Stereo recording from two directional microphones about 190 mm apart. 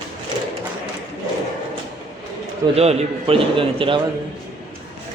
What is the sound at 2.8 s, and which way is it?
A man's voice, 30° right (ahead or behind).